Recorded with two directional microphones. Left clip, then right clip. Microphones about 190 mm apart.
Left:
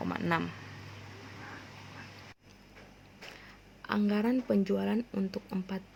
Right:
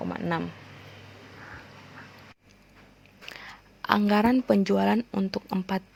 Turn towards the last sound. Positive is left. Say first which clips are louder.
# right 9 dB
turn(degrees=-45)  # may be behind; listen again after turning